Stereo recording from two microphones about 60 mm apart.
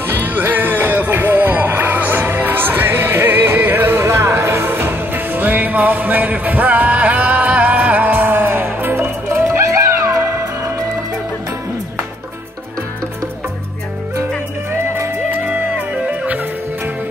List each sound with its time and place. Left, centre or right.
0.0 s music: right
9.4 s music: right